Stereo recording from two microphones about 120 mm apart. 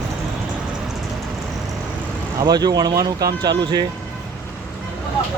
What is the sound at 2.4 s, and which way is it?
Speech, 35° right (ahead or behind).